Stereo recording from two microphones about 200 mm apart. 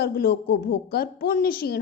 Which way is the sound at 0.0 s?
50° left (ahead or behind).